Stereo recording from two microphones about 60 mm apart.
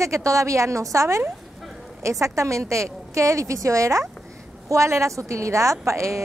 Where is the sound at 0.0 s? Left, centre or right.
Right.